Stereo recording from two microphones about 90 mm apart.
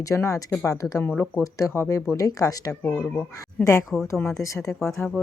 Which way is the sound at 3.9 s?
Centre (ahead or behind).